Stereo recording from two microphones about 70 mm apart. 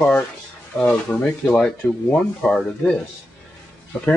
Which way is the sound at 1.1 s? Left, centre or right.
Centre.